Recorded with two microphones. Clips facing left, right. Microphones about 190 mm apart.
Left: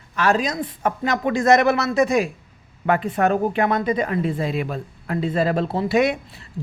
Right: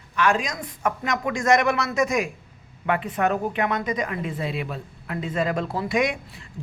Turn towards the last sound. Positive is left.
turn(degrees=30)  # may be behind; listen again after turning